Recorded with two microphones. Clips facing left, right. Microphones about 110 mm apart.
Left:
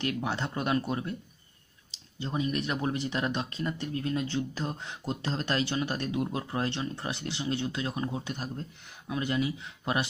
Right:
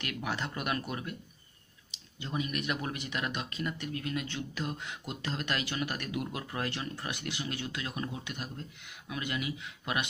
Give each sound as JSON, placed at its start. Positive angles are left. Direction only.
{"t": 0.0, "sound": "speech", "side_deg": 30}